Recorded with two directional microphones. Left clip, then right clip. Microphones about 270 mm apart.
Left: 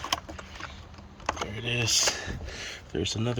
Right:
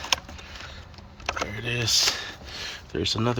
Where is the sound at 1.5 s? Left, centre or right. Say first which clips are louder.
Right 3 dB; centre.